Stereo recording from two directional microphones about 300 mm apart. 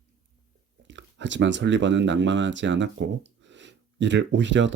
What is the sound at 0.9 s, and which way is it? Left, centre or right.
Speech, right.